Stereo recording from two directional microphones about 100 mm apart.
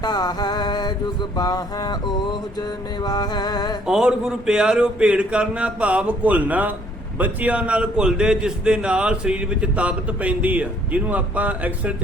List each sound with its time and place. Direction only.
0.0 s mantra: 45° left (ahead or behind)
3.8 s a man's voice: 5° right (ahead or behind)